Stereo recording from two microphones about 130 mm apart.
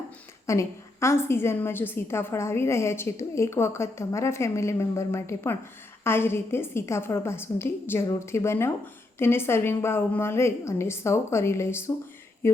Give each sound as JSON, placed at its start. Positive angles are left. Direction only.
{"t": 0.4, "sound": "a woman's voice", "side_deg": 20}